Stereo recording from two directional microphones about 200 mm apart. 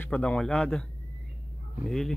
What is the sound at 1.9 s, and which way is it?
Speech, centre (ahead or behind).